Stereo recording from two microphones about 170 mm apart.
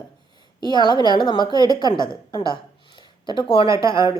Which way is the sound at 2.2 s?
25° left (ahead or behind).